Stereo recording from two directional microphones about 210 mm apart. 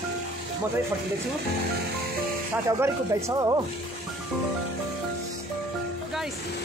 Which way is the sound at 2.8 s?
15° right (ahead or behind).